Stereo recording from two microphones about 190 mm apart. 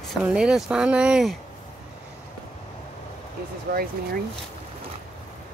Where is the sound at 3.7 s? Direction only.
50° right (ahead or behind).